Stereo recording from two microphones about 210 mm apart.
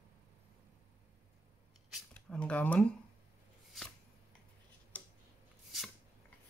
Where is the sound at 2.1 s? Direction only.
5° left (ahead or behind).